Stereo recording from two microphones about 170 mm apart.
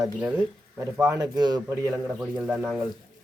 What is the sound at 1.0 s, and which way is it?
A man's voice, 20° right (ahead or behind).